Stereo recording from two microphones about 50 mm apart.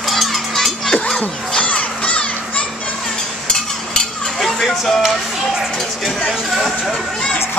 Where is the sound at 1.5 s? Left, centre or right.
Left.